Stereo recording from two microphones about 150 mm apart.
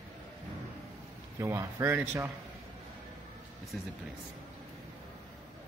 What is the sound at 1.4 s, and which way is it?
Speech, 20° right (ahead or behind).